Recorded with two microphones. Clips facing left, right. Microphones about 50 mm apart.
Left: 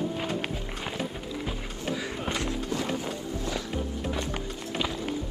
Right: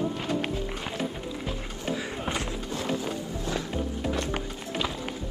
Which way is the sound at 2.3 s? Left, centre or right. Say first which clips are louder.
Left 2 dB; centre.